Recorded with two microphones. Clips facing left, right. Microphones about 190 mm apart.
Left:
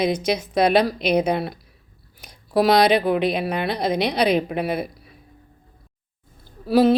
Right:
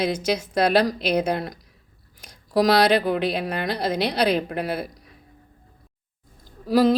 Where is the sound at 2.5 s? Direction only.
60° left (ahead or behind).